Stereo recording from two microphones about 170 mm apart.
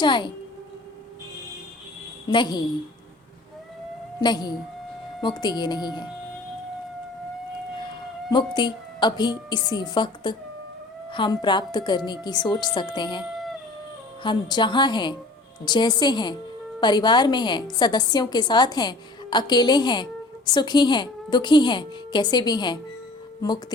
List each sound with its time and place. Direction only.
0.0 s a woman's voice: 25° left (ahead or behind)
2.3 s a woman's voice: 25° left (ahead or behind)
4.2 s a woman's voice: 25° left (ahead or behind)
8.3 s a woman's voice: 25° left (ahead or behind)
13.3 s howl: centre (ahead or behind)
14.2 s a woman's voice: 25° left (ahead or behind)